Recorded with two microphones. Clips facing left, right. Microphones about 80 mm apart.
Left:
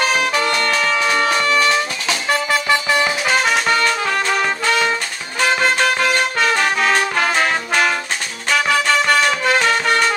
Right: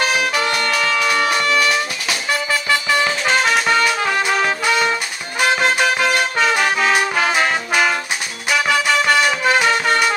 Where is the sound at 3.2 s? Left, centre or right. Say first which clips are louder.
Even; centre.